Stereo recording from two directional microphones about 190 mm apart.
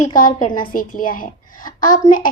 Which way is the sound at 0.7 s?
45° left (ahead or behind).